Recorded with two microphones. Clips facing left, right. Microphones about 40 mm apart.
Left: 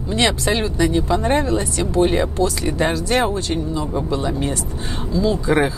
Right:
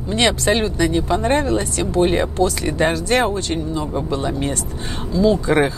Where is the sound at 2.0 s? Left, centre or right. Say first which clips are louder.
Right 1 dB; right.